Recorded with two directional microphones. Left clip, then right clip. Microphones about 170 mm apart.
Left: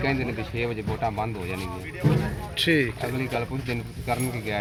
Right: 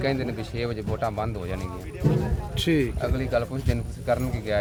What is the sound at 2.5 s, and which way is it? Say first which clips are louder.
Speech: left 2 dB; 85° right.